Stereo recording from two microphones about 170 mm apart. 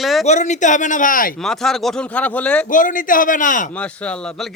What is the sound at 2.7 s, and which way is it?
Speech, 50° left (ahead or behind).